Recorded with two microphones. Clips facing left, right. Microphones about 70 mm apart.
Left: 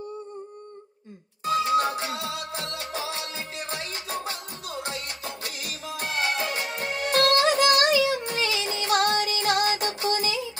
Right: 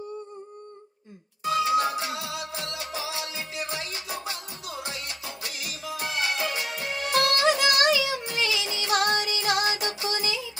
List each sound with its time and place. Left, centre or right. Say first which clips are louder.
1.4 s music: left 1 dB; left